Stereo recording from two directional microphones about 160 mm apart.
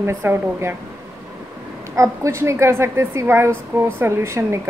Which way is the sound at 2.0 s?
20° right (ahead or behind).